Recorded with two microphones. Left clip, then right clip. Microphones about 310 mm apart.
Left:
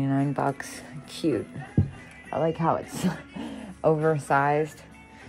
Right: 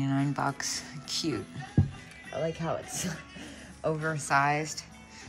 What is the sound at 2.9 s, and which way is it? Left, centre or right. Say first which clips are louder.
Music: left 5 dB; centre.